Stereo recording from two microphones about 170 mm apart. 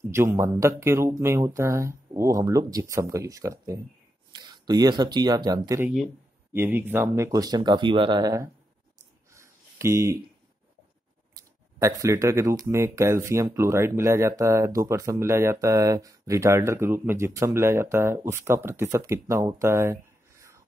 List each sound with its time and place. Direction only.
0.1 s speech: 15° right (ahead or behind)
6.5 s speech: 10° right (ahead or behind)
9.3 s a sound: 15° right (ahead or behind)
11.3 s speech: 20° right (ahead or behind)